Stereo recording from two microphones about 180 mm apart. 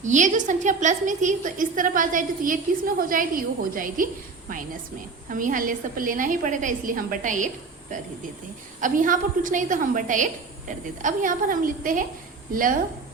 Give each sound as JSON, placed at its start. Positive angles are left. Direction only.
{"t": 0.0, "sound": "a woman's voice", "side_deg": -45}
{"t": 8.8, "sound": "a woman's voice", "side_deg": -45}